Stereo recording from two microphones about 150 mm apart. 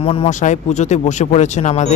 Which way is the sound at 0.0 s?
40° left (ahead or behind).